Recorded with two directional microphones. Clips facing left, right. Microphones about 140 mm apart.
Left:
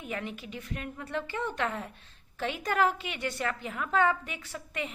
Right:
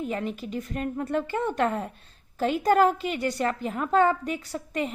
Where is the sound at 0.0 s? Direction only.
35° right (ahead or behind).